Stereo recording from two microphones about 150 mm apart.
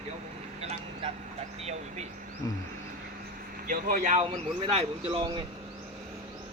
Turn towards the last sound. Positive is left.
turn(degrees=-35)  # may be behind; listen again after turning